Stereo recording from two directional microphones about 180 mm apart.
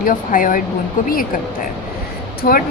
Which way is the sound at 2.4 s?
55° left (ahead or behind).